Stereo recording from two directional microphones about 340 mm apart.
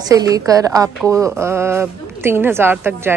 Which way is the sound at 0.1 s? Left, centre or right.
Centre.